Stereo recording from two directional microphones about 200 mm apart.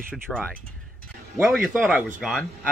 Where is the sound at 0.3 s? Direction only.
5° left (ahead or behind).